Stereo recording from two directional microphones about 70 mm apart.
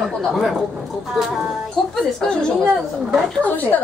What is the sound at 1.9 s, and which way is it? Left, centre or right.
Speech, centre.